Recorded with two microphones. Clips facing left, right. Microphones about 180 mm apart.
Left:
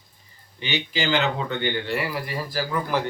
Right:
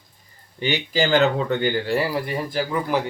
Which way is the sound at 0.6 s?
45° right (ahead or behind).